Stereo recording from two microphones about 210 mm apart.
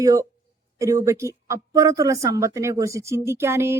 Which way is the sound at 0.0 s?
15° right (ahead or behind).